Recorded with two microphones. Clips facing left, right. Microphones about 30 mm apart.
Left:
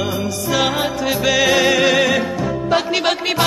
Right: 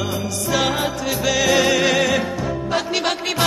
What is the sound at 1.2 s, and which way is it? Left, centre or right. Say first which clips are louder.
Music: left 2 dB; centre.